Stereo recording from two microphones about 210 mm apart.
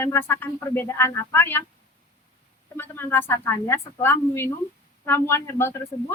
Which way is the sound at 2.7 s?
10° left (ahead or behind).